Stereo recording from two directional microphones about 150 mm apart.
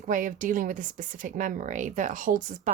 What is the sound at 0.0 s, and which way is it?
Speech, 60° right (ahead or behind).